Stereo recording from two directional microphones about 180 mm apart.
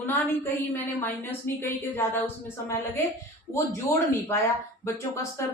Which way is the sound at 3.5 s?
15° left (ahead or behind).